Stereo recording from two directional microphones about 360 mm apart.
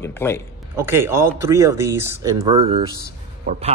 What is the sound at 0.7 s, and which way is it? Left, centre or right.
Speech, centre.